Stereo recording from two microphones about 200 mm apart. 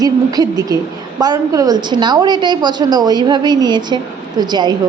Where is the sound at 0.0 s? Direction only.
20° right (ahead or behind).